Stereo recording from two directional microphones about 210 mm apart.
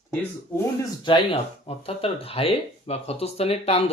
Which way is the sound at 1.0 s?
25° left (ahead or behind).